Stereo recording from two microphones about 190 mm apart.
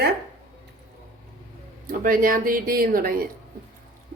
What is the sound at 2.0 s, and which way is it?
A woman's voice, 45° right (ahead or behind).